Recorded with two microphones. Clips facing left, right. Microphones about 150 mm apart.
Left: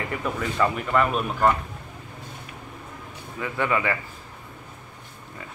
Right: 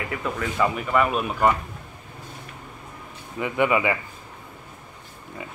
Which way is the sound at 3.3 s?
15° right (ahead or behind).